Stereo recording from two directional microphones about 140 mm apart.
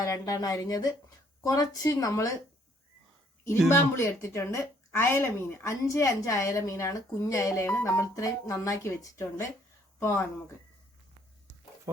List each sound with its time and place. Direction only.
0.0 s speech: 25° left (ahead or behind)
3.9 s speech: 20° left (ahead or behind)